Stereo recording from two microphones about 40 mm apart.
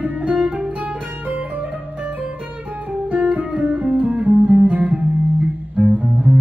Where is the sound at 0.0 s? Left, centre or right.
Right.